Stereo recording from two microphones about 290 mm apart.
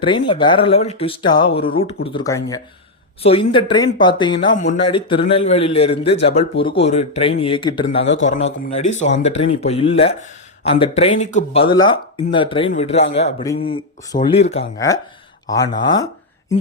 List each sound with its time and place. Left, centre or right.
0.0 s speech: centre